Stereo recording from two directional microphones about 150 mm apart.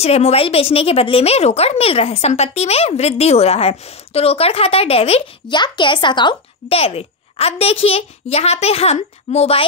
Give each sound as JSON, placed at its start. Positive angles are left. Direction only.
{"t": 0.0, "sound": "a woman's voice", "side_deg": 45}
{"t": 5.5, "sound": "a woman's voice", "side_deg": 30}